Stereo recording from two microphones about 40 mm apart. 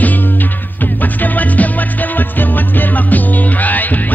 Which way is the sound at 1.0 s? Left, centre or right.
Left.